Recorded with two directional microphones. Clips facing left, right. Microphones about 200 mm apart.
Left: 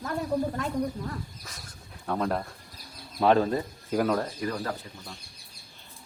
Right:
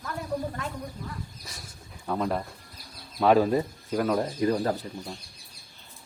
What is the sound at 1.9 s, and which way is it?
Speech, centre (ahead or behind).